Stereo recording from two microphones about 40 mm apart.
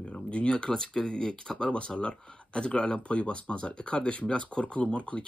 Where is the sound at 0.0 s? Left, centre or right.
Left.